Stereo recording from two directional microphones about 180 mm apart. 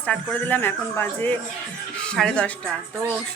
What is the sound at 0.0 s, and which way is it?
A woman's voice, 10° left (ahead or behind).